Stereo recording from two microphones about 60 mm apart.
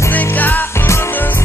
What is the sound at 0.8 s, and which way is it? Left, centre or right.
Music, left.